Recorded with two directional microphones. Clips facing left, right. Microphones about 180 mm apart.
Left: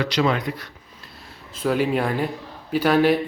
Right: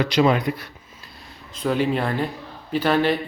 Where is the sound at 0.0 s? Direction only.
15° right (ahead or behind).